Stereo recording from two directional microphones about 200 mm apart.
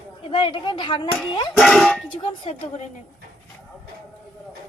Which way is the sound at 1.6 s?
Centre (ahead or behind).